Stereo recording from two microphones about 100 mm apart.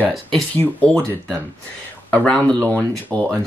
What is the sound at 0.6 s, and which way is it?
Speech, 15° left (ahead or behind).